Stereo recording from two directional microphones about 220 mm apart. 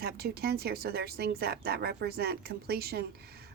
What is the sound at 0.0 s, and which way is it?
Speech, 45° right (ahead or behind).